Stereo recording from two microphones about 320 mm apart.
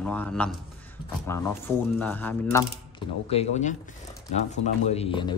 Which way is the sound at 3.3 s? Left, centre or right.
Centre.